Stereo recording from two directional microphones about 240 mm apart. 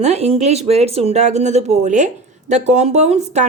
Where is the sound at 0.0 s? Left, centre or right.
Right.